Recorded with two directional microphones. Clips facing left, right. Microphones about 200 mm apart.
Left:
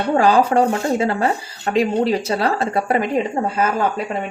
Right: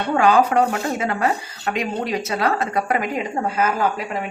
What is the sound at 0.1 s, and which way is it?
Speech, 35° left (ahead or behind).